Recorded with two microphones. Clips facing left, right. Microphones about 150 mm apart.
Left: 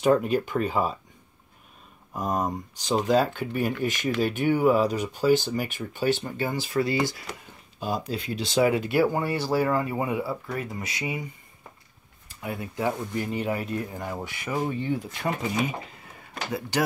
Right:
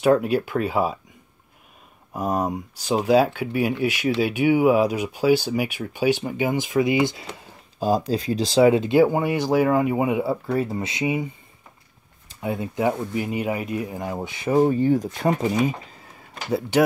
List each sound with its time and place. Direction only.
0.0 s speech: 5° right (ahead or behind)
2.1 s speech: 10° right (ahead or behind)
7.8 s speech: 35° right (ahead or behind); by 10.3 s 20° right (ahead or behind)
10.4 s speech: 30° right (ahead or behind)
12.4 s speech: 20° right (ahead or behind)